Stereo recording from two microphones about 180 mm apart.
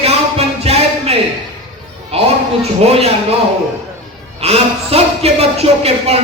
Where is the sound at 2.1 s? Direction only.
35° right (ahead or behind).